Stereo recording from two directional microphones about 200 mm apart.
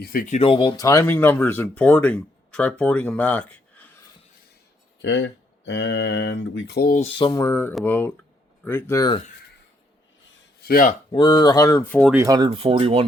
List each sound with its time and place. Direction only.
0.0 s speech: 45° left (ahead or behind)
0.3 s speech: 25° left (ahead or behind); by 4.0 s 5° left (ahead or behind)
5.0 s speech: 65° left (ahead or behind)
7.0 s mantra: 30° left (ahead or behind)
7.3 s speech: 15° left (ahead or behind)
10.2 s a sound: 60° left (ahead or behind)
11.1 s speech: 20° left (ahead or behind)
12.1 s speech: 15° right (ahead or behind)